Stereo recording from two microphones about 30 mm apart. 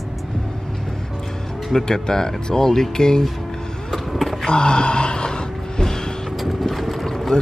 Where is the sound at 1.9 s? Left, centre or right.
Left.